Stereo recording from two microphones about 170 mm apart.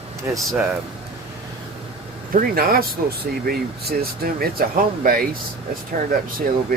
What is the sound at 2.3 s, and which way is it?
Speech, 60° right (ahead or behind).